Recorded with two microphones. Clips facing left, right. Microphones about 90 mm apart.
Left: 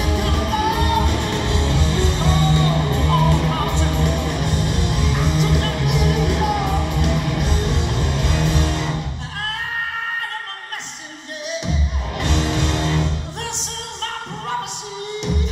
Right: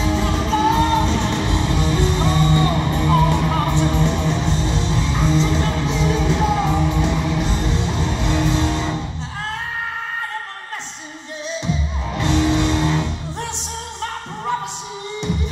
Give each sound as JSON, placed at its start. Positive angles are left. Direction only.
{"t": 0.1, "sound": "music", "side_deg": -20}
{"t": 0.7, "sound": "music", "side_deg": 10}
{"t": 1.0, "sound": "music", "side_deg": -20}
{"t": 5.0, "sound": "music", "side_deg": 15}
{"t": 5.3, "sound": "music", "side_deg": -25}
{"t": 11.5, "sound": "music", "side_deg": 20}
{"t": 12.4, "sound": "music", "side_deg": -20}